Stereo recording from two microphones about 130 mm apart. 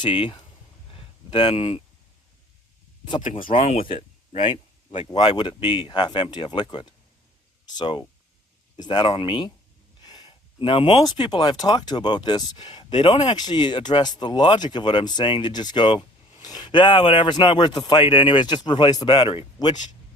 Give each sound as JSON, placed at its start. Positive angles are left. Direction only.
{"t": 0.0, "sound": "speech", "side_deg": 40}
{"t": 0.9, "sound": "a sound", "side_deg": 40}
{"t": 3.0, "sound": "speech", "side_deg": 35}
{"t": 3.2, "sound": "speech", "side_deg": 90}
{"t": 3.5, "sound": "speech", "side_deg": 60}
{"t": 5.1, "sound": "speech", "side_deg": 35}
{"t": 10.0, "sound": "a sound", "side_deg": 30}
{"t": 11.0, "sound": "speech", "side_deg": 30}